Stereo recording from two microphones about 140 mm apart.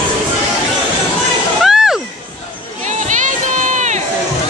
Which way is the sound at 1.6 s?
5° right (ahead or behind).